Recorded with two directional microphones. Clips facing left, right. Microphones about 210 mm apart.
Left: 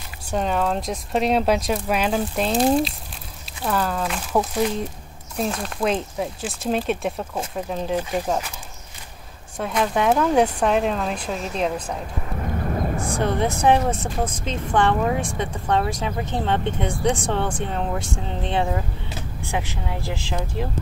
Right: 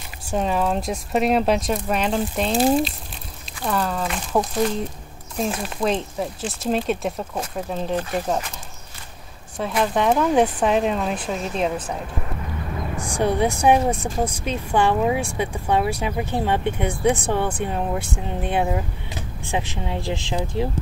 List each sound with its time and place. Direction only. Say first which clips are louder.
0.3 s speech: right 1 dB; centre (ahead or behind)
7.9 s speech: even; 10° left (ahead or behind)
9.6 s speech: right 1 dB; centre (ahead or behind)
12.9 s speech: right 5 dB; 15° right (ahead or behind)